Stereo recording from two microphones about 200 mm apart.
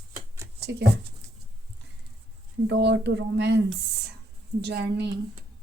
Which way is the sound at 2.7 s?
60° right (ahead or behind).